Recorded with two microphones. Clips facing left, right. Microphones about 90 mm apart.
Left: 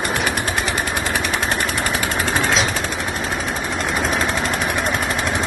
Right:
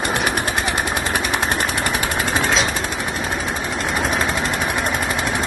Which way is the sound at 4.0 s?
15° right (ahead or behind).